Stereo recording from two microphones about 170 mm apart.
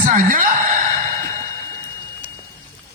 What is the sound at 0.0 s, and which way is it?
Speech, 55° right (ahead or behind).